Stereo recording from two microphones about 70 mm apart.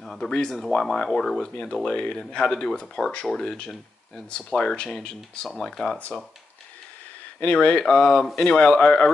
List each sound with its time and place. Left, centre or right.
0.0 s a sound: centre
0.3 s speech: centre
5.9 s speech: left
7.3 s speech: centre